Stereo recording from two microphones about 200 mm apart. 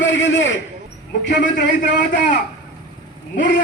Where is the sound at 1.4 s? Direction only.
40° left (ahead or behind).